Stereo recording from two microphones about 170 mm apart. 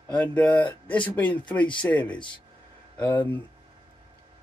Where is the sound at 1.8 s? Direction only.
5° left (ahead or behind).